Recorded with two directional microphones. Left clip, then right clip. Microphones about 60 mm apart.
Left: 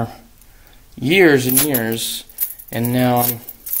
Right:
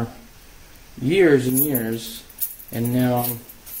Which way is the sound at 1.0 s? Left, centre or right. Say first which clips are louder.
Left 4 dB; left.